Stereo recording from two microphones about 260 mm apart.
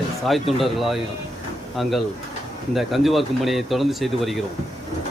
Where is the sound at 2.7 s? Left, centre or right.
Centre.